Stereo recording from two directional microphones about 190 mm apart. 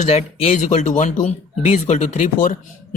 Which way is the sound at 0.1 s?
30° left (ahead or behind).